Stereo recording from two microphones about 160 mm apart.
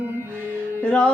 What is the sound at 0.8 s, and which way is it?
Music, 10° left (ahead or behind).